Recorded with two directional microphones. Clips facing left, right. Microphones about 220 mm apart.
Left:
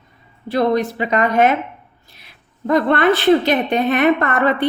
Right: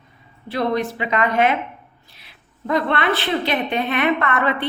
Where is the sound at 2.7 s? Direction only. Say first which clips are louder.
Left 6 dB; 45° left (ahead or behind).